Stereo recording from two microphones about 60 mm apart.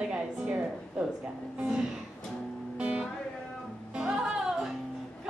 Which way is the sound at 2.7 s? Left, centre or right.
Right.